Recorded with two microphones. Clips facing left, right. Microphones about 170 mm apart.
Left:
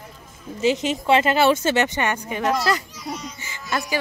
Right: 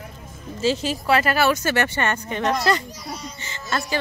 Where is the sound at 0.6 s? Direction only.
20° left (ahead or behind); by 2.8 s 5° left (ahead or behind).